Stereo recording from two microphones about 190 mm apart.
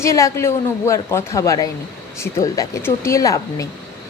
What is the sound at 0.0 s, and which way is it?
A woman's voice, 15° left (ahead or behind).